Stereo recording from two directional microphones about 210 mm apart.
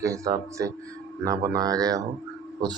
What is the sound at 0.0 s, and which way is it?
Speech, 15° right (ahead or behind).